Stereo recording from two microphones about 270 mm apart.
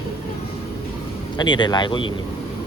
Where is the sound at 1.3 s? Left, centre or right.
Centre.